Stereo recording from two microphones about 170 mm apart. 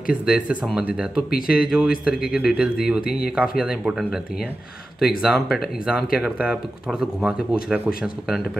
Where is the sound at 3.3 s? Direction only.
5° right (ahead or behind).